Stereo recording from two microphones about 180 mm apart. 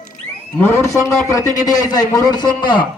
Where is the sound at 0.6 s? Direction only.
10° left (ahead or behind).